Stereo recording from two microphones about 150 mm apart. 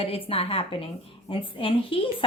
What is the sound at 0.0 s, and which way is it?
A woman's voice, 40° left (ahead or behind).